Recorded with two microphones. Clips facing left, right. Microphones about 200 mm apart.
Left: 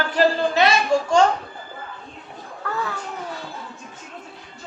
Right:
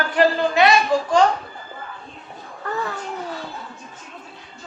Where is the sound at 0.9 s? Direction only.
5° right (ahead or behind).